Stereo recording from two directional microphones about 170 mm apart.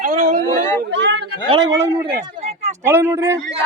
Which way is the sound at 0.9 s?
90° right.